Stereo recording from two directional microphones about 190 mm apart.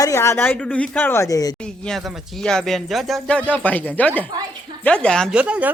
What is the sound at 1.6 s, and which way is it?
A woman's voice, 5° left (ahead or behind).